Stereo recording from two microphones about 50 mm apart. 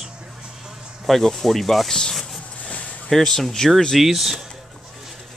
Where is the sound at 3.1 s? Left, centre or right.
Centre.